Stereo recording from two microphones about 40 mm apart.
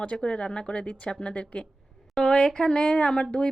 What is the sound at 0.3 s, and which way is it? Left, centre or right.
A woman's voice, left.